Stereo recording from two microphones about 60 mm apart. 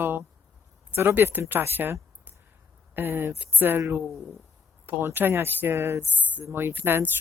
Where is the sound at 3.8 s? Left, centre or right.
Right.